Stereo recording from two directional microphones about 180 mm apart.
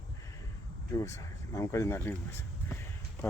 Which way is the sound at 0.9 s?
15° left (ahead or behind).